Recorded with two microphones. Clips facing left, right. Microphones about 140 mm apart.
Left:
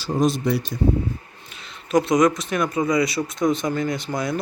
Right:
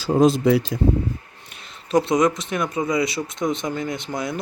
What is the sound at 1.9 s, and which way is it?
Speech, 30° right (ahead or behind).